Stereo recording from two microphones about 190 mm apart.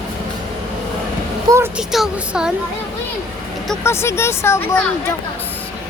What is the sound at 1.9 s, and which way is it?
Speech, 5° right (ahead or behind).